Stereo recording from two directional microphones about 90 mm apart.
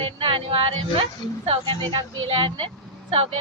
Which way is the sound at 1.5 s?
75° right (ahead or behind).